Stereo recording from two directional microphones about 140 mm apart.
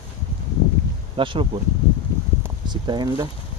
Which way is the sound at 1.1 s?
40° right (ahead or behind).